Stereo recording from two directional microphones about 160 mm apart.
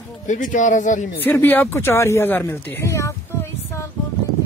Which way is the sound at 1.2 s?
15° left (ahead or behind).